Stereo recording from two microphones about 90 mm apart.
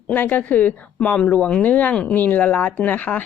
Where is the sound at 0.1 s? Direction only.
20° left (ahead or behind).